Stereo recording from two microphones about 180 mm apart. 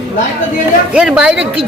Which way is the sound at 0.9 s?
5° right (ahead or behind).